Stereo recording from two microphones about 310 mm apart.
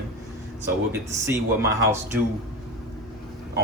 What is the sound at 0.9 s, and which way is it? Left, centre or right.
Speech, centre.